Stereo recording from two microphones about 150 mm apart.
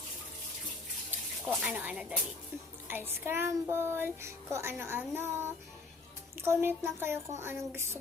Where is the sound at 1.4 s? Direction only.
5° right (ahead or behind).